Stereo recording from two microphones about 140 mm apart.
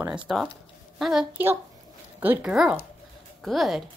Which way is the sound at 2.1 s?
15° right (ahead or behind).